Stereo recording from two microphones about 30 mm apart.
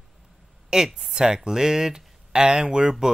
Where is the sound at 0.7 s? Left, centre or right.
Centre.